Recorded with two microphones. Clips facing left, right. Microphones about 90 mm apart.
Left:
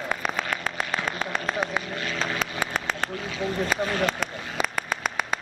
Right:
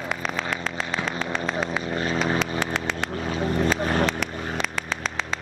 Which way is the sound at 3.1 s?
40° right (ahead or behind).